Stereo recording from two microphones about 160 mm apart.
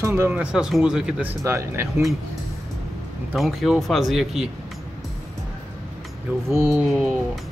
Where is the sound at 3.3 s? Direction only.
Centre (ahead or behind).